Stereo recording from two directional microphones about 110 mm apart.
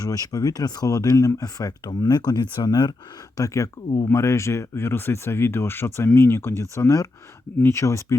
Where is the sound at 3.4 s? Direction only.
30° left (ahead or behind).